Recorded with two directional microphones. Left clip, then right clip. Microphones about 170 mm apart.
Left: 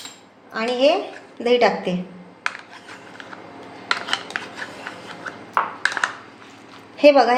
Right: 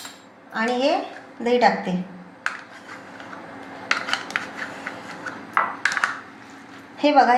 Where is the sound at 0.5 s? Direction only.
35° left (ahead or behind).